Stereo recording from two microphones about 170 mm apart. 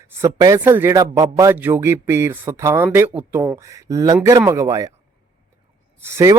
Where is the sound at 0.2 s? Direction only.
20° right (ahead or behind).